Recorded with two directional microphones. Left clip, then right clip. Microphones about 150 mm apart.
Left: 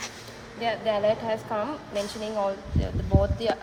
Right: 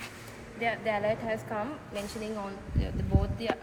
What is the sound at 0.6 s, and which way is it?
A woman's voice, 90° left.